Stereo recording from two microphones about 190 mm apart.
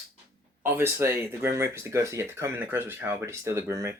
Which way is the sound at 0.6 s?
10° right (ahead or behind).